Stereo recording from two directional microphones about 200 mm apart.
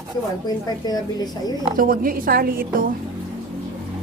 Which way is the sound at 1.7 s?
45° right (ahead or behind).